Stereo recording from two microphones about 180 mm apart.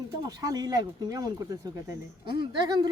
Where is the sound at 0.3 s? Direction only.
20° right (ahead or behind).